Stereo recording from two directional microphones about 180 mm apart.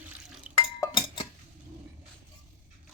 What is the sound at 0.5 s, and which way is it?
Dishes, 30° left (ahead or behind).